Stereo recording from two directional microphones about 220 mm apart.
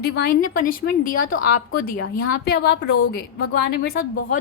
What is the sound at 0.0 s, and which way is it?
A woman's voice, 45° left (ahead or behind).